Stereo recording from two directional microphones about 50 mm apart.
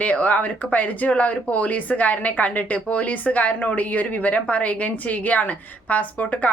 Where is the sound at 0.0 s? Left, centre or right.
Left.